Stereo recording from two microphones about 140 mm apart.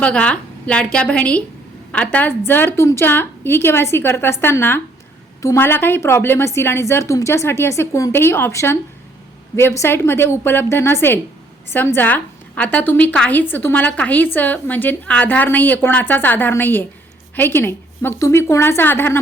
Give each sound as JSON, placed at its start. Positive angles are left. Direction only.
{"t": 0.0, "sound": "a woman's voice", "side_deg": 10}